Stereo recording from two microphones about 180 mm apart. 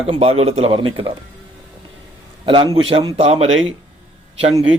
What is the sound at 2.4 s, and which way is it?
Speech, 25° right (ahead or behind).